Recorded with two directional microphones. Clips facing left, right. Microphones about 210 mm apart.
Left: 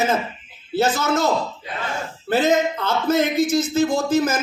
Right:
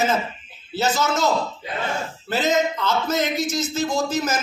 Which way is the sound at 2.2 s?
55° left (ahead or behind).